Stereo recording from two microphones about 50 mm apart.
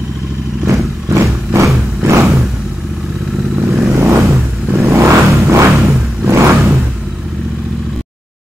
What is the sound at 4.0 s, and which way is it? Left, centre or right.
Vehicle, right.